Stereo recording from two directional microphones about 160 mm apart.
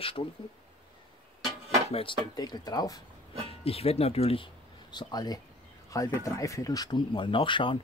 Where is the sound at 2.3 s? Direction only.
25° left (ahead or behind).